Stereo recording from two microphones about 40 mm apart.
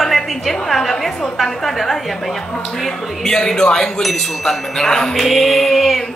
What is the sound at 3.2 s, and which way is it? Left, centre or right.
Speech, centre.